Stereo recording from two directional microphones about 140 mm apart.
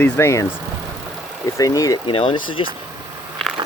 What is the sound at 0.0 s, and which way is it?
Speech, 20° left (ahead or behind).